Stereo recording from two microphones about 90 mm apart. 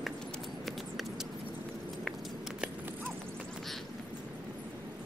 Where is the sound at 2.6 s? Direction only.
20° right (ahead or behind).